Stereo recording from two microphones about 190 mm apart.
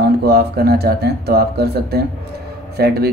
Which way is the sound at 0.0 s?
55° right (ahead or behind).